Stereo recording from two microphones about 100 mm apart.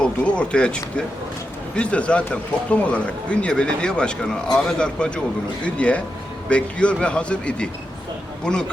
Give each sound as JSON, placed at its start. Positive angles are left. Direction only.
{"t": 0.0, "sound": "speech", "side_deg": 10}